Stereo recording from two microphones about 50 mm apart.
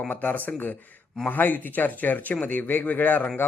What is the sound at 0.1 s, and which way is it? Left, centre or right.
A man's voice, left.